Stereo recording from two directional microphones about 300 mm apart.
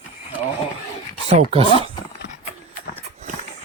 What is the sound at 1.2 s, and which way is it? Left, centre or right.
Speech, centre.